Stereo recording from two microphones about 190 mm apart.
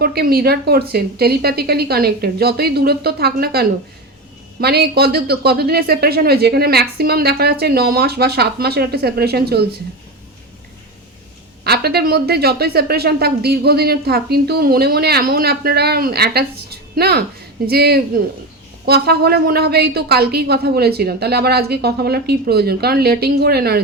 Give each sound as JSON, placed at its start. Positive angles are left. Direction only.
{"t": 0.0, "sound": "speech", "side_deg": -55}
{"t": 11.6, "sound": "speech", "side_deg": -55}